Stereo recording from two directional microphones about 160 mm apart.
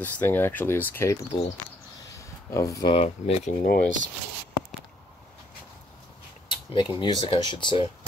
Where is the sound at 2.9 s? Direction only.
40° left (ahead or behind).